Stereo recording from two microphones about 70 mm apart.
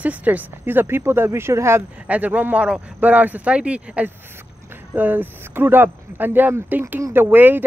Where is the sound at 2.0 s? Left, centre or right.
Right.